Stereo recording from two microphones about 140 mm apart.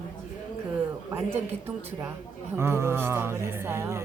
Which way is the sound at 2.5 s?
20° right (ahead or behind).